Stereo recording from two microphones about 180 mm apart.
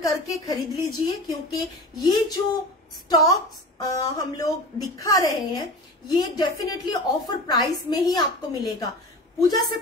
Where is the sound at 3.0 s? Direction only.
20° left (ahead or behind).